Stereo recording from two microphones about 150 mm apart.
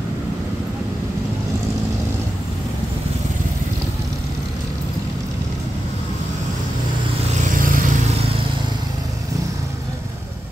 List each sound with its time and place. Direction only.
7.5 s vehicle: 65° right (ahead or behind)